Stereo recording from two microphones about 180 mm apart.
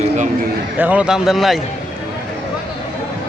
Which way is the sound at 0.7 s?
10° right (ahead or behind).